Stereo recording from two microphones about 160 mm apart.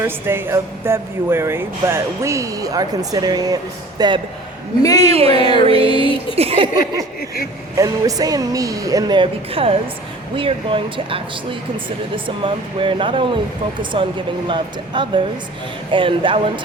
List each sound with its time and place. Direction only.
0.0 s speech: 15° right (ahead or behind)
4.9 s speech: 40° right (ahead or behind)
5.3 s music: 30° left (ahead or behind)
5.6 s speech: 35° right (ahead or behind)
7.8 s speech: 20° right (ahead or behind)